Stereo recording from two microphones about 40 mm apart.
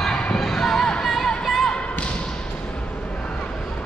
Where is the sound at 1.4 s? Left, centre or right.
Centre.